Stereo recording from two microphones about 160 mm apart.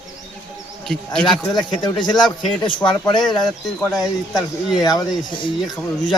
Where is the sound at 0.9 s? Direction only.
5° left (ahead or behind).